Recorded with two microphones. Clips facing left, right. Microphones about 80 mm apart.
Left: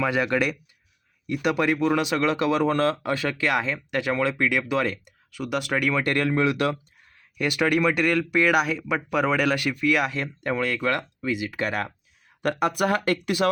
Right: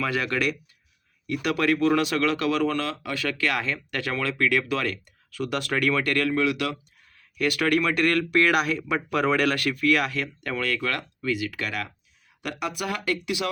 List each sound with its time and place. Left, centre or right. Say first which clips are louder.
0.0 s speech: left 3 dB; left
6.1 s speech: left 1 dB; left
7.3 s speech: left 1 dB; left
12.4 s speech: left 7 dB; left